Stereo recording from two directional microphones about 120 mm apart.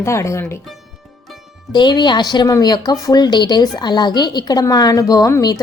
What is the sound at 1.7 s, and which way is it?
A woman's voice, 40° left (ahead or behind).